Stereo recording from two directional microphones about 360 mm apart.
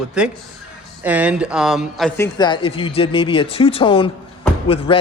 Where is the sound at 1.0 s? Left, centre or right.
Centre.